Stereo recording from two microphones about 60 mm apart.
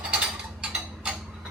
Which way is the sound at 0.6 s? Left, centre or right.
Centre.